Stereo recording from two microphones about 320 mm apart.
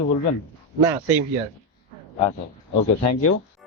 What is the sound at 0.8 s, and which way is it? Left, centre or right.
Speech, centre.